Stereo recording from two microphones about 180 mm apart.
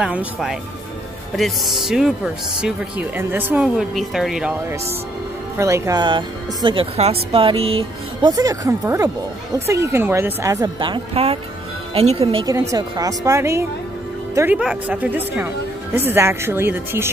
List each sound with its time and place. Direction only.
0.0 s speech: 5° right (ahead or behind)
5.6 s speech: 20° right (ahead or behind)